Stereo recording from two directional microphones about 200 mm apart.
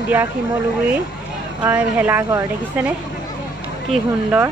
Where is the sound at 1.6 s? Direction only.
10° right (ahead or behind).